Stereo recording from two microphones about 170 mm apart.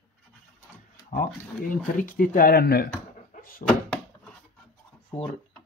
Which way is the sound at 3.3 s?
55° left (ahead or behind).